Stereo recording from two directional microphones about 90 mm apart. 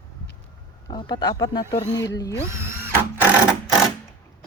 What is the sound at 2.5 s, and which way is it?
Drill, 25° right (ahead or behind).